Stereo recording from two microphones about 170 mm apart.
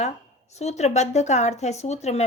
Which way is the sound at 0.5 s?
40° left (ahead or behind).